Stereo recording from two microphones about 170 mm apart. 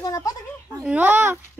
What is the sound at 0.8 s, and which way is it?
Speech, 10° right (ahead or behind).